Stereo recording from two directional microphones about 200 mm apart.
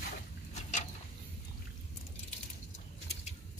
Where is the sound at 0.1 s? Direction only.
35° left (ahead or behind).